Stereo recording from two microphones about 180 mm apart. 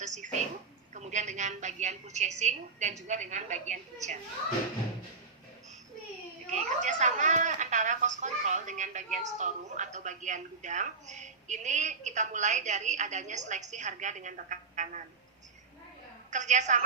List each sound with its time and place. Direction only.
0.0 s a sound: 40° right (ahead or behind)
0.9 s a woman's voice: 40° right (ahead or behind)
6.5 s a woman's voice: 45° right (ahead or behind)
16.3 s a woman's voice: 40° right (ahead or behind)